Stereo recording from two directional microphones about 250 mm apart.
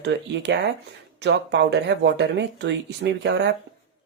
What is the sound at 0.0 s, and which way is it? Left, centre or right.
Speech, right.